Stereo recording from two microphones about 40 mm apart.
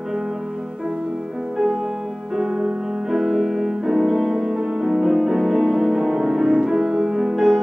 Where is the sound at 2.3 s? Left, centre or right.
Centre.